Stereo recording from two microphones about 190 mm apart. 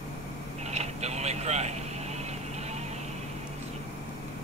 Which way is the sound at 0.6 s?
35° right (ahead or behind).